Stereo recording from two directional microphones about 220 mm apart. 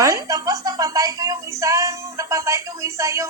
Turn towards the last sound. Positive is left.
turn(degrees=-15)  # may be behind; listen again after turning